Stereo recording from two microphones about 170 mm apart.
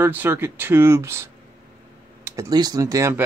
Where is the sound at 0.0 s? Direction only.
10° right (ahead or behind).